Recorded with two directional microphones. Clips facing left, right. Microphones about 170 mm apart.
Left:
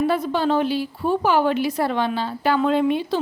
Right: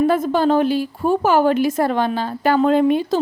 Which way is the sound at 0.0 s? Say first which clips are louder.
Right 4 dB; 45° right (ahead or behind).